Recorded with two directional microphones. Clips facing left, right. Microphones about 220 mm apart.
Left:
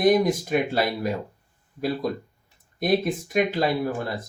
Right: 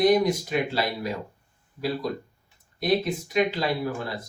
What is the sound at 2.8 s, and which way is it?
Speech, 50° left (ahead or behind).